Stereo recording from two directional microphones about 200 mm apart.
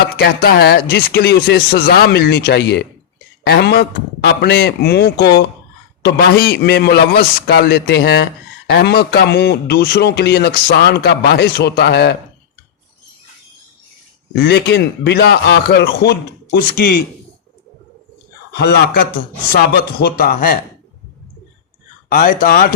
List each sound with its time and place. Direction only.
0.2 s a man's voice: 50° left (ahead or behind)
14.3 s a man's voice: 55° left (ahead or behind)
18.5 s speech: 50° left (ahead or behind)
22.1 s speech: 45° left (ahead or behind)